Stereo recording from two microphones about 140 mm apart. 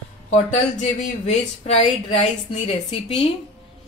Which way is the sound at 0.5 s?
50° left (ahead or behind).